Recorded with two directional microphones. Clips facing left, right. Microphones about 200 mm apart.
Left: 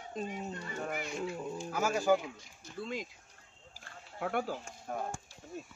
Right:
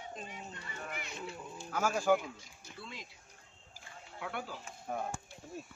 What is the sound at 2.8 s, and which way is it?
Speech, 45° left (ahead or behind).